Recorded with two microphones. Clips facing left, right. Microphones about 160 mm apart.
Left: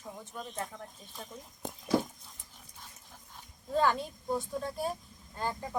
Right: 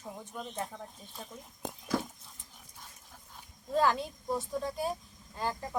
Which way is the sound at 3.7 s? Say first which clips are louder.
Even; centre (ahead or behind).